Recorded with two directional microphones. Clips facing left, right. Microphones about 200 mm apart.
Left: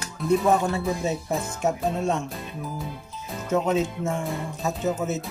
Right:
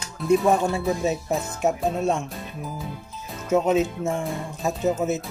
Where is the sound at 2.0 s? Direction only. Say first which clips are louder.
Right 2 dB; centre (ahead or behind).